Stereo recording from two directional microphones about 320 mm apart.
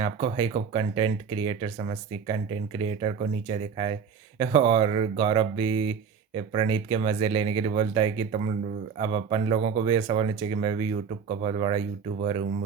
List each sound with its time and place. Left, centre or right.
0.0 s speech: centre